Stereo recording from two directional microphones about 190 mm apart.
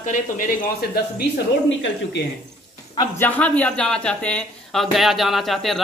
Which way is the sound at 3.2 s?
10° left (ahead or behind).